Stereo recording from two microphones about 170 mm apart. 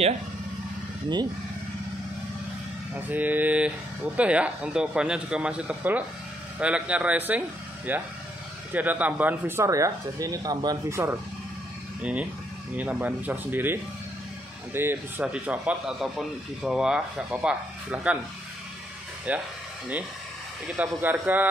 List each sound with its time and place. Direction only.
3.1 s a man's voice: 10° right (ahead or behind)
19.3 s a man's voice: 10° right (ahead or behind)
20.6 s a man's voice: 10° right (ahead or behind)